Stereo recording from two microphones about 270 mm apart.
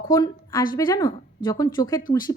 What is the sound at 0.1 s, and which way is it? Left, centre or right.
A woman's voice, centre.